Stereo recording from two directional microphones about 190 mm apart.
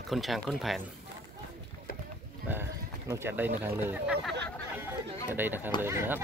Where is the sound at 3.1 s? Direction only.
10° right (ahead or behind).